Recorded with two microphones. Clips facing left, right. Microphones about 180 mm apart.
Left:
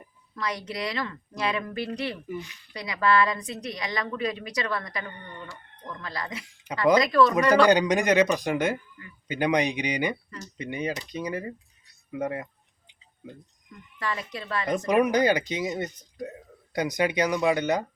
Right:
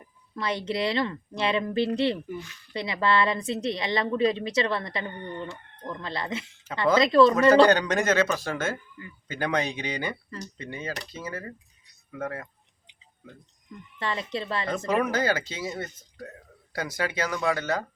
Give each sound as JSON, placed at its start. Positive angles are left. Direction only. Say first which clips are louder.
{"t": 0.3, "sound": "a woman's voice", "louder": "right 4 dB", "side_deg": -25}
{"t": 7.7, "sound": "speech", "louder": "left 2 dB", "side_deg": 15}
{"t": 14.0, "sound": "a woman's voice", "louder": "right 2 dB", "side_deg": -25}
{"t": 14.8, "sound": "speech", "louder": "left 4 dB", "side_deg": 15}